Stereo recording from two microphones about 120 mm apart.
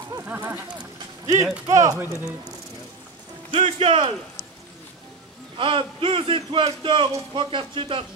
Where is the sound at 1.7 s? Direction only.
25° right (ahead or behind).